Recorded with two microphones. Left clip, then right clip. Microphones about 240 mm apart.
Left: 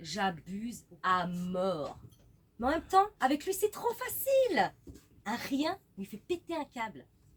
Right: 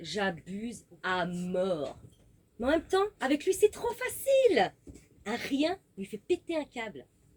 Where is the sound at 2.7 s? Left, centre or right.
Centre.